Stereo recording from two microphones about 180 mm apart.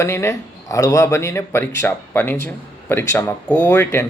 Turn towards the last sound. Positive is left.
turn(degrees=10)  # may be behind; listen again after turning